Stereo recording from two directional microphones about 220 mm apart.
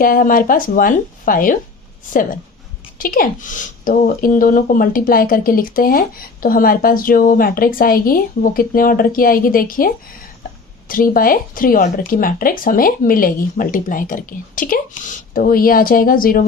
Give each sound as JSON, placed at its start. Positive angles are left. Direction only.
{"t": 0.0, "sound": "speech", "side_deg": 40}
{"t": 3.0, "sound": "speech", "side_deg": 40}